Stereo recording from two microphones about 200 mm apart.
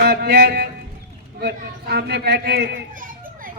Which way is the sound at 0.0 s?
50° right (ahead or behind).